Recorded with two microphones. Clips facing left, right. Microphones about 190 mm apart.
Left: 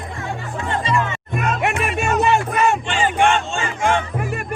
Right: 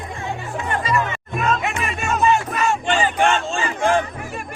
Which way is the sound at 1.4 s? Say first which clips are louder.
Left 1 dB; 65° left (ahead or behind).